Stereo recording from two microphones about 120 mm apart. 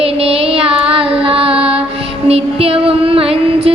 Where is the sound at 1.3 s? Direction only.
55° right (ahead or behind).